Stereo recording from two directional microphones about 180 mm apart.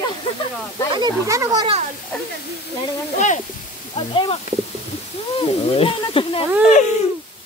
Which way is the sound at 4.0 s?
30° left (ahead or behind).